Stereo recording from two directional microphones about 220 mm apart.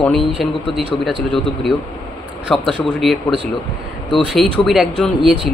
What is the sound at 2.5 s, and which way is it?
Speech, centre (ahead or behind).